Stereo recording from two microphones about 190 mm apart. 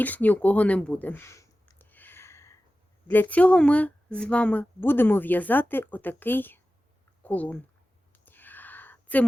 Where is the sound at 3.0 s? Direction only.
10° left (ahead or behind).